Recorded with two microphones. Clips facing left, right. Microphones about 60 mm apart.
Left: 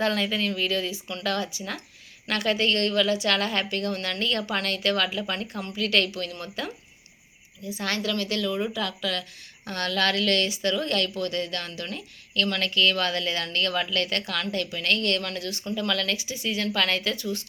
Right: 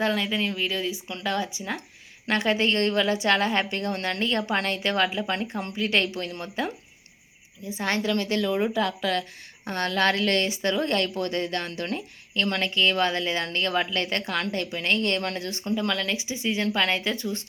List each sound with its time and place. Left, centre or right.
0.0 s speech: centre; by 6.7 s right
7.8 s speech: right